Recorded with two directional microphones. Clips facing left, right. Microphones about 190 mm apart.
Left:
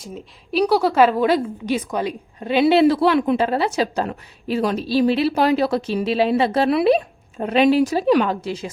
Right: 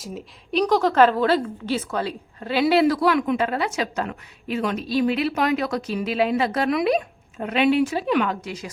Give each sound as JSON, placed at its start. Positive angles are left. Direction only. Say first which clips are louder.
{"t": 0.0, "sound": "a woman's voice", "louder": "even", "side_deg": 0}
{"t": 0.6, "sound": "a woman's voice", "louder": "left 2 dB", "side_deg": 10}